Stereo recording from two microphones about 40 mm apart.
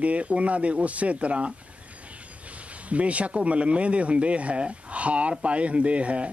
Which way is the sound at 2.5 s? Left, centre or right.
Right.